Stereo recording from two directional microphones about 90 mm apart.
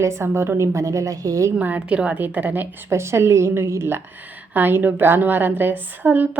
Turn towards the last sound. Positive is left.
turn(degrees=-20)  # may be behind; listen again after turning